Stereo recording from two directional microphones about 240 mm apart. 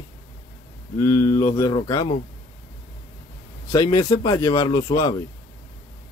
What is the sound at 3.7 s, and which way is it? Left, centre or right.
A man's voice, centre.